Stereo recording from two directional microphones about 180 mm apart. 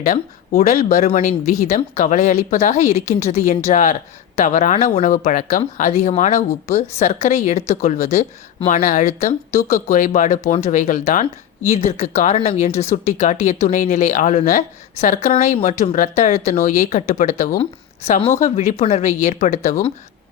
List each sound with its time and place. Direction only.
0.0 s speech: 50° left (ahead or behind)
17.6 s speech: 35° left (ahead or behind)